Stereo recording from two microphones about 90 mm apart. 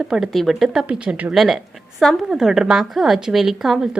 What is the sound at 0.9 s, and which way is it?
Speech, 15° right (ahead or behind).